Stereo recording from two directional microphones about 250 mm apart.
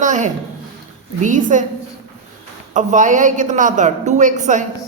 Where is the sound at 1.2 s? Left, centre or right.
Right.